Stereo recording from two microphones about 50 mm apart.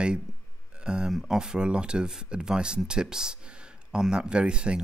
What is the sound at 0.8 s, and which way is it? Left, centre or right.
Speech, centre.